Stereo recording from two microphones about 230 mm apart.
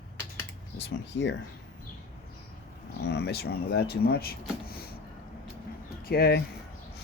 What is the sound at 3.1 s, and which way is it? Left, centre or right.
Speech, left.